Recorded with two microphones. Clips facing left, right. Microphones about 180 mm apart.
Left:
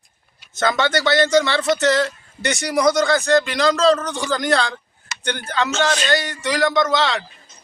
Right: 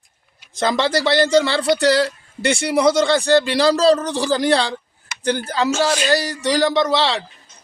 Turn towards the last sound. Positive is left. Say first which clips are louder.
# right 1 dB
turn(degrees=-35)  # may be behind; listen again after turning